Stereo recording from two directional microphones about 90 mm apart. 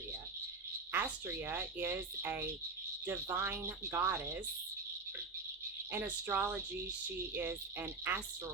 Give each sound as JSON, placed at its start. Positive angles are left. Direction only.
{"t": 0.9, "sound": "speech", "side_deg": -20}
{"t": 5.9, "sound": "speech", "side_deg": -20}